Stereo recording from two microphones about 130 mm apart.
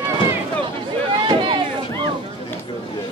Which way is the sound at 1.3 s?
40° right (ahead or behind).